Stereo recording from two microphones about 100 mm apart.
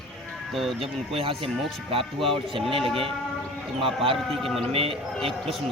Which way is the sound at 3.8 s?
65° right (ahead or behind).